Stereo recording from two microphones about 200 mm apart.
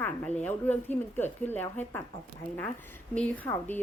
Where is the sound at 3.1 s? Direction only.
5° left (ahead or behind).